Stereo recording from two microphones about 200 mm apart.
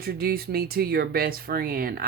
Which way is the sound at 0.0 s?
50° right (ahead or behind).